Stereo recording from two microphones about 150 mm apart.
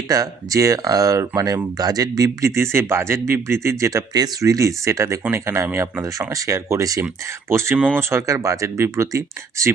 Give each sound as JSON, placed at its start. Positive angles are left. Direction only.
{"t": 0.1, "sound": "speech", "side_deg": -25}